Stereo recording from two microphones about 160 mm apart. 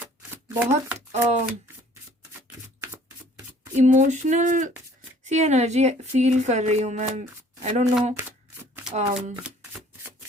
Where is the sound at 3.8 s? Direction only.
50° right (ahead or behind).